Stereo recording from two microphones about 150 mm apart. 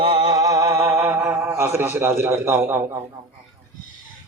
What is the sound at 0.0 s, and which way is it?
Music, 30° right (ahead or behind).